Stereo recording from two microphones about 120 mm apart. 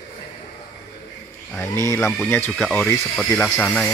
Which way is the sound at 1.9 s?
Centre (ahead or behind).